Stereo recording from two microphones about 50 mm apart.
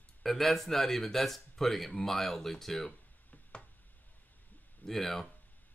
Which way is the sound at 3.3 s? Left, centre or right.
Left.